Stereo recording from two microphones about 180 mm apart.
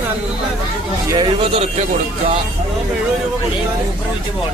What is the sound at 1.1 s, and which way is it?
Speech, 25° right (ahead or behind).